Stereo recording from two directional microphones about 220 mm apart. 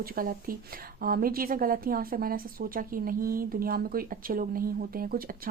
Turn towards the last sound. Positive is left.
turn(degrees=-40)  # may be behind; listen again after turning